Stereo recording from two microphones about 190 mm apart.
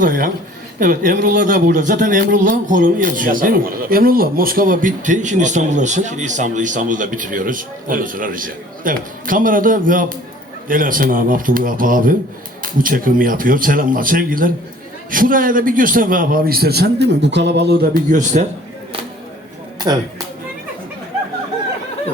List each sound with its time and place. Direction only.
0.0 s a man's voice: 45° right (ahead or behind)
19.8 s speech: 20° right (ahead or behind)